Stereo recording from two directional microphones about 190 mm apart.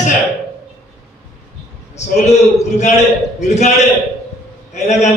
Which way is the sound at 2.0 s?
35° left (ahead or behind).